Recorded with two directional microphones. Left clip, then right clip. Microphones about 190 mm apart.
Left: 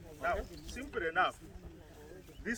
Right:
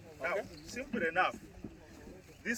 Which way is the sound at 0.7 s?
25° right (ahead or behind).